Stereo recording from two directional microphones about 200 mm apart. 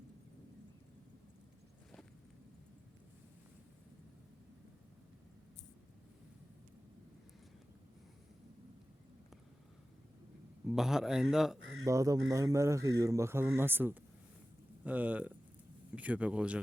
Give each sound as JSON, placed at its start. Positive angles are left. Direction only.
{"t": 10.7, "sound": "speech", "side_deg": 0}
{"t": 11.9, "sound": "speech", "side_deg": -15}